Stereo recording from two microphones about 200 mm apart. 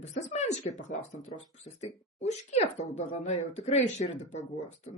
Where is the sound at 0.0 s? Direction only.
35° left (ahead or behind).